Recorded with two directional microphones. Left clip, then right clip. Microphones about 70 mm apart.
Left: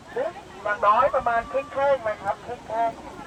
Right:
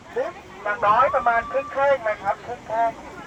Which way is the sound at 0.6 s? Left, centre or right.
Centre.